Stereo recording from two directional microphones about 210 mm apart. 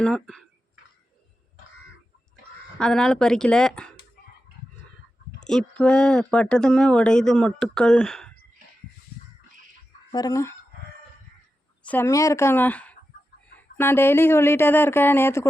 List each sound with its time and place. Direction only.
0.0 s speech: centre (ahead or behind)
2.7 s speech: 5° left (ahead or behind)
5.5 s speech: 5° left (ahead or behind)
10.1 s speech: 15° left (ahead or behind)
11.9 s speech: 10° left (ahead or behind)